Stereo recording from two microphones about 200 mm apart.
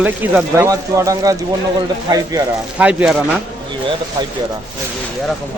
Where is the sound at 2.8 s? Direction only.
5° right (ahead or behind).